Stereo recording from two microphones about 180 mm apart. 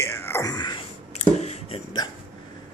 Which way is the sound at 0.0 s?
15° left (ahead or behind).